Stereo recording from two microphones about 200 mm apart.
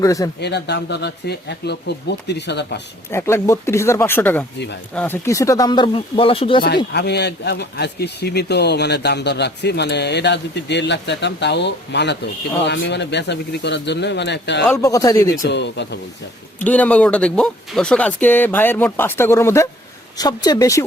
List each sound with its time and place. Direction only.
0.0 s speech: 15° left (ahead or behind)
0.3 s speech: 55° left (ahead or behind)
3.1 s speech: 10° left (ahead or behind)
6.9 s speech: 55° left (ahead or behind)
14.8 s speech: 15° left (ahead or behind)
15.4 s speech: 60° left (ahead or behind)
16.6 s speech: 10° left (ahead or behind)